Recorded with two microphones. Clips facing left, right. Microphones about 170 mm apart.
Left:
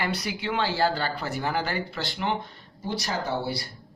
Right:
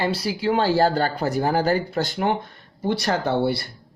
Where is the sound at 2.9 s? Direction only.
60° right (ahead or behind).